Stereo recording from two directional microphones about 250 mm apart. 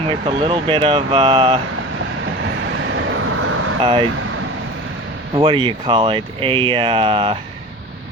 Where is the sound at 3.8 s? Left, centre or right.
Right.